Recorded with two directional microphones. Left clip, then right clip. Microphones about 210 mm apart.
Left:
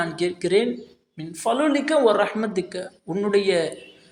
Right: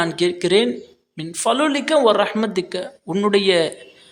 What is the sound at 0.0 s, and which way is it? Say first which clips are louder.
A man's voice: right 5 dB; 20° right (ahead or behind).